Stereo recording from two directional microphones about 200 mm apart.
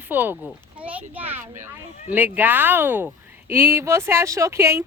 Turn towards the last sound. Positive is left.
turn(degrees=-15)  # may be behind; listen again after turning